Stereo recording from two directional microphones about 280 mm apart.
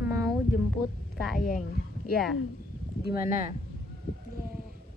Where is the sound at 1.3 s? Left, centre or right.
Left.